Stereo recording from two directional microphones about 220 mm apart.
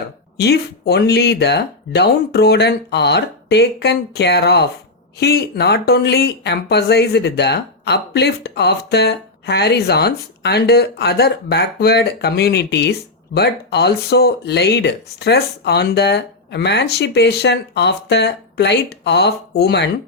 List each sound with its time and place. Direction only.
0.3 s speech: 50° left (ahead or behind)